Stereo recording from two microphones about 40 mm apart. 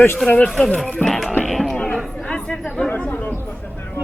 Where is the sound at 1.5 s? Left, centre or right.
Centre.